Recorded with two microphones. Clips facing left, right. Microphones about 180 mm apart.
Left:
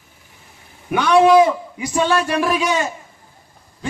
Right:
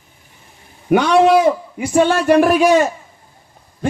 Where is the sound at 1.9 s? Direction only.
50° right (ahead or behind).